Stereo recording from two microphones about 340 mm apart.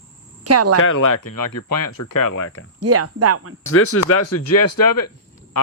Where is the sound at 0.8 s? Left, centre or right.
Left.